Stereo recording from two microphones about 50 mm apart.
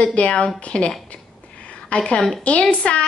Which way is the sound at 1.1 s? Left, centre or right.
Left.